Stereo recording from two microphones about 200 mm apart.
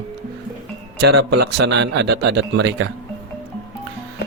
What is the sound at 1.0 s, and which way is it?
Speech, 55° right (ahead or behind).